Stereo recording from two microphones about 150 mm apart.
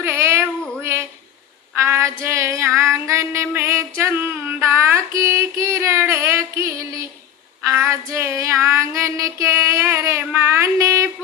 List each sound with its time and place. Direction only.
0.0 s female singing: 15° right (ahead or behind)
0.8 s a sound: 20° right (ahead or behind)
1.8 s female singing: 20° right (ahead or behind)